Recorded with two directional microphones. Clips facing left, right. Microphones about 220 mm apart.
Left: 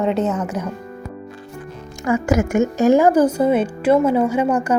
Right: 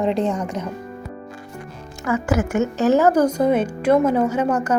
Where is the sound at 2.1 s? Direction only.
10° left (ahead or behind).